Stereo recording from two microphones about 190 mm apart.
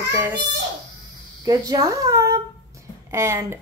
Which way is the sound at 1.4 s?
20° right (ahead or behind).